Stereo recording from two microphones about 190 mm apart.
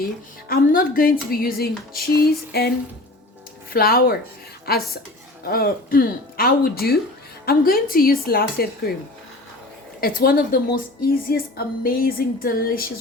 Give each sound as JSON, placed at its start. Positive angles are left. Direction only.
{"t": 0.4, "sound": "a woman's voice", "side_deg": 50}
{"t": 10.0, "sound": "a woman's voice", "side_deg": 50}